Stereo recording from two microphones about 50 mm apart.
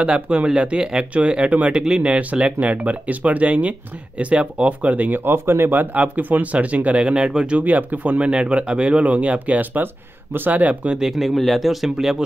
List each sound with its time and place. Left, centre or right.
0.0 s speech: right
1.7 s speech: centre
2.0 s speech: right
11.0 s speech: centre